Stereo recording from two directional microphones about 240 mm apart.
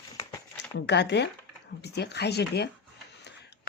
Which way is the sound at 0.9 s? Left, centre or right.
Left.